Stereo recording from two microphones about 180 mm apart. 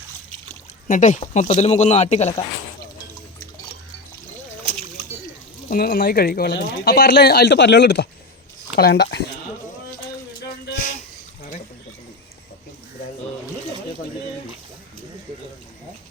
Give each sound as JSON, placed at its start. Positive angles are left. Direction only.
{"t": 0.9, "sound": "speech", "side_deg": 45}
{"t": 5.6, "sound": "speech", "side_deg": 55}
{"t": 10.7, "sound": "a sound", "side_deg": 45}